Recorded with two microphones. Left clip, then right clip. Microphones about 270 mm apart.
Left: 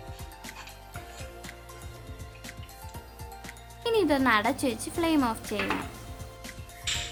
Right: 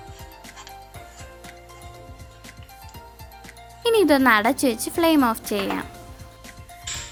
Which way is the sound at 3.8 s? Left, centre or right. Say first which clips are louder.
Right 8 dB; right.